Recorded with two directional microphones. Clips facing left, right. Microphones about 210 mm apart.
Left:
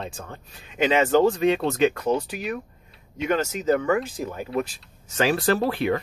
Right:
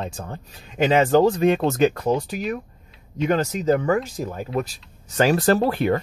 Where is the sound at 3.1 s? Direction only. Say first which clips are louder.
Right 3 dB; 40° right (ahead or behind).